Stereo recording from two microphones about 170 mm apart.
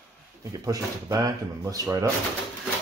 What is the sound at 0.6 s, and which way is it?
Speech, 20° right (ahead or behind).